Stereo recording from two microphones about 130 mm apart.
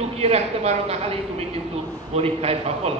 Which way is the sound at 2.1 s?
50° right (ahead or behind).